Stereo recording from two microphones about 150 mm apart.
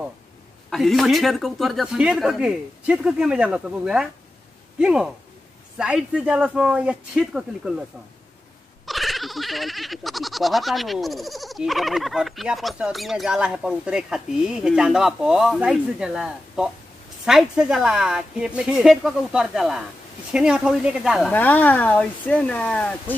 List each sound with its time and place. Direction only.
0.7 s goat: centre (ahead or behind)
8.8 s goat: centre (ahead or behind)
21.3 s speech: 10° left (ahead or behind)